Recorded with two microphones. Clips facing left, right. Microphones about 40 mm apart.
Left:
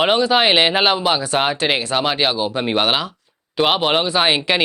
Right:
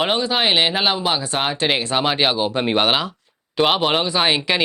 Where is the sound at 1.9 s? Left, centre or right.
Centre.